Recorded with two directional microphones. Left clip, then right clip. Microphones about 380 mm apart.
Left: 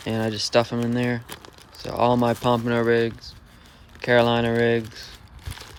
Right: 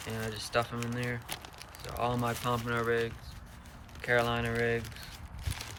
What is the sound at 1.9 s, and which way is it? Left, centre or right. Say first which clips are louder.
Speech: left 12 dB; centre.